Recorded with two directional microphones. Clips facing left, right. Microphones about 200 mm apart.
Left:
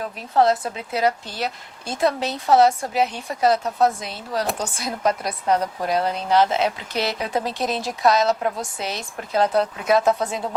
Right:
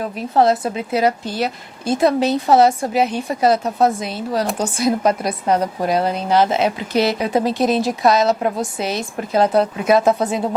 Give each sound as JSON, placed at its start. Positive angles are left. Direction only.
{"t": 0.0, "sound": "speech", "side_deg": -10}